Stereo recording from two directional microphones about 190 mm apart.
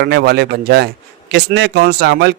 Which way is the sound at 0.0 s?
60° right (ahead or behind).